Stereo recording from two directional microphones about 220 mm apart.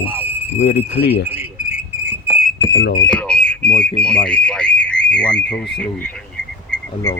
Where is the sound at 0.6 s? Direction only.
50° left (ahead or behind).